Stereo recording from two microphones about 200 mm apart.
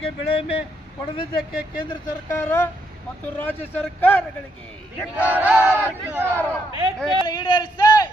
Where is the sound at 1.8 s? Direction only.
15° left (ahead or behind).